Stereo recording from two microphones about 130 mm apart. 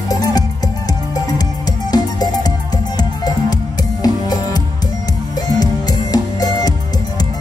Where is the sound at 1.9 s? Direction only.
30° left (ahead or behind).